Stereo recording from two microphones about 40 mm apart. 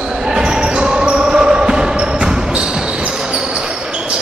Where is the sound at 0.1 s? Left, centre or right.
Centre.